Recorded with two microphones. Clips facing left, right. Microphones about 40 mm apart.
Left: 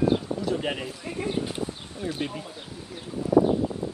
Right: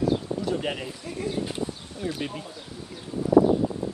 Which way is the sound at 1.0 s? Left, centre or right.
Left.